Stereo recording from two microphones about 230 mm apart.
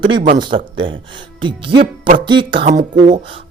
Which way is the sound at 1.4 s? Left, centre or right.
Right.